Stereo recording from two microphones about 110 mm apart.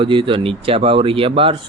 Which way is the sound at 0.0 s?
50° right (ahead or behind).